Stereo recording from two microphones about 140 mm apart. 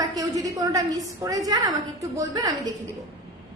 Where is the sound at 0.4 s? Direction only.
25° right (ahead or behind).